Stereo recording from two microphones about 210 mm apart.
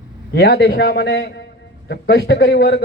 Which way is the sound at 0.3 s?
50° left (ahead or behind).